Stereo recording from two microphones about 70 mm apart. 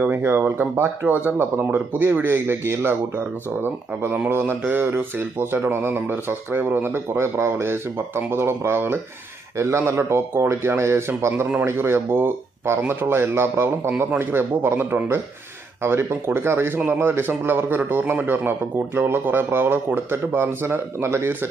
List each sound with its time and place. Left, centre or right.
0.0 s speech: right